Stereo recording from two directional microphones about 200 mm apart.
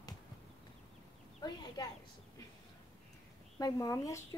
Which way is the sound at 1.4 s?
20° left (ahead or behind).